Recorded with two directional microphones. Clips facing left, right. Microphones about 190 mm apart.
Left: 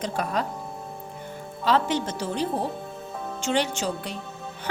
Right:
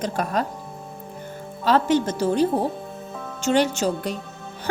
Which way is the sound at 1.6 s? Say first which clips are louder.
Right 4 dB; 45° right (ahead or behind).